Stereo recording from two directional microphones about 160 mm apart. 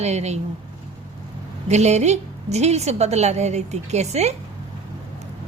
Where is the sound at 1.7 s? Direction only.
45° right (ahead or behind).